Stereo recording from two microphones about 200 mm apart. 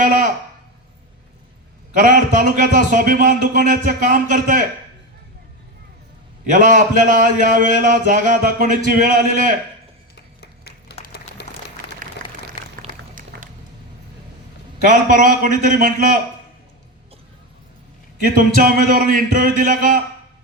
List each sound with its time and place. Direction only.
0.0 s speech: 40° right (ahead or behind)
2.0 s a man's voice: 40° right (ahead or behind)
6.5 s a man's voice: 40° right (ahead or behind)
10.2 s clapping: 55° left (ahead or behind)
11.4 s a sound: 60° left (ahead or behind)
12.2 s a sound: 45° right (ahead or behind)
14.8 s a man's voice: 40° right (ahead or behind)
18.6 s a man's voice: 45° right (ahead or behind)